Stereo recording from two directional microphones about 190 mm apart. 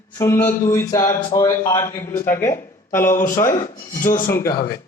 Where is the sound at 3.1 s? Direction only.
45° left (ahead or behind).